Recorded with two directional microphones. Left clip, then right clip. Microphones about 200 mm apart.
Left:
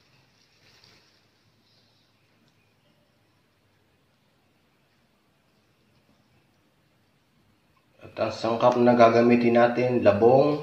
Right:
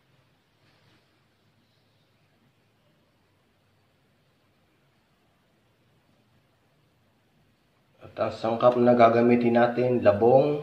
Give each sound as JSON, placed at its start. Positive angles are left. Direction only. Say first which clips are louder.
{"t": 8.2, "sound": "speech", "louder": "even", "side_deg": -5}